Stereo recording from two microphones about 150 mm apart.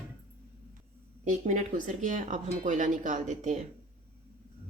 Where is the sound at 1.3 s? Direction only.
55° right (ahead or behind).